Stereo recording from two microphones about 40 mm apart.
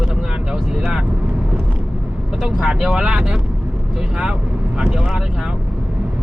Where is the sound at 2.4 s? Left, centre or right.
Centre.